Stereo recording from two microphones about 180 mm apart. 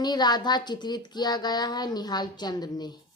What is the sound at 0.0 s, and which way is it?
A woman's voice, 25° left (ahead or behind).